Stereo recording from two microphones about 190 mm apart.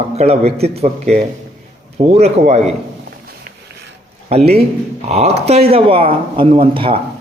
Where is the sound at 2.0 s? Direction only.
35° right (ahead or behind).